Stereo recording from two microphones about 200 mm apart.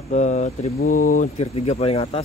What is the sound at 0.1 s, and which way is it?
Speech, 35° left (ahead or behind).